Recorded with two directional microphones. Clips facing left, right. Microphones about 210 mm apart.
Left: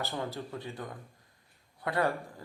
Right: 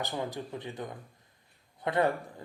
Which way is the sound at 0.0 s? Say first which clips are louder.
Right 1 dB; 15° right (ahead or behind).